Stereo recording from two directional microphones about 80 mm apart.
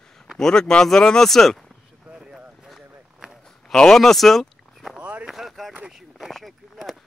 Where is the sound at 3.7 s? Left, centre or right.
Centre.